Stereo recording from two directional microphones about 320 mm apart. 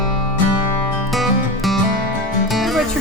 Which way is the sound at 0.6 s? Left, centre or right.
Right.